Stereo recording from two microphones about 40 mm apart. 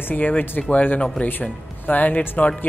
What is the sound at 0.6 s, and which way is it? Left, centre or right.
Speech, left.